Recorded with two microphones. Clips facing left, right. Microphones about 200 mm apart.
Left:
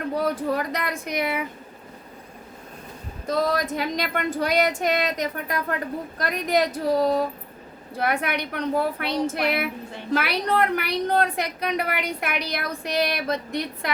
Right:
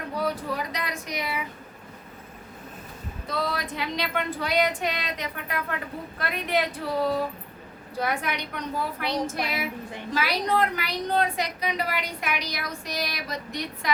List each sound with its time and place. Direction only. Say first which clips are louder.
0.5 s a woman's voice: left 5 dB; 55° left (ahead or behind)
3.2 s a woman's voice: left 6 dB; 45° left (ahead or behind)
7.9 s a woman's voice: left 3 dB; 60° left (ahead or behind)